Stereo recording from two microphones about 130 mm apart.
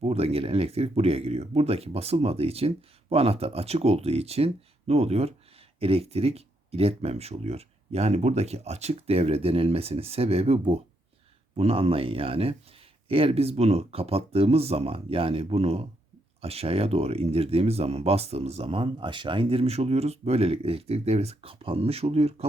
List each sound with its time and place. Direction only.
0.0 s speech: 50° right (ahead or behind)